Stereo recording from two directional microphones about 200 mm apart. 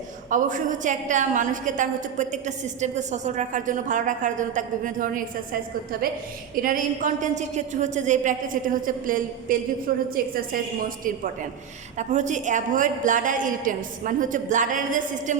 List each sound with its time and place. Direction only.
0.3 s a woman's voice: 40° right (ahead or behind)
6.6 s a woman's voice: 45° right (ahead or behind)